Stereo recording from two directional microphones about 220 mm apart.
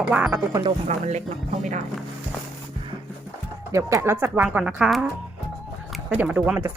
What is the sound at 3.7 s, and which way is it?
Speech, 15° right (ahead or behind).